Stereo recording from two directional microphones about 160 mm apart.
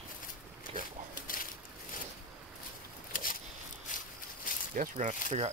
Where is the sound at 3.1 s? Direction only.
60° left (ahead or behind).